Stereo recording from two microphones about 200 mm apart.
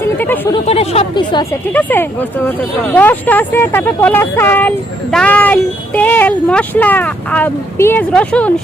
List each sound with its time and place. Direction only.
0.2 s speech: 10° left (ahead or behind)
0.5 s speech: 30° left (ahead or behind)
1.7 s speech: 10° left (ahead or behind)